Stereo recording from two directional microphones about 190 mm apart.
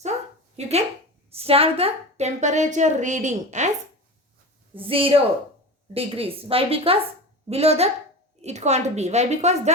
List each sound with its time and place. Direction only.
0.6 s a woman's voice: 35° right (ahead or behind)
4.7 s a woman's voice: 30° right (ahead or behind)